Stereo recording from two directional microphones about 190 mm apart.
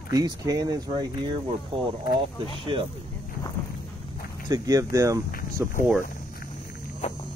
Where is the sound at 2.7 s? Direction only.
25° right (ahead or behind).